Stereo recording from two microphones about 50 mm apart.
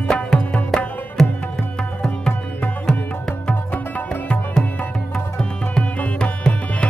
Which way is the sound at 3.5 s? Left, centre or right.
Left.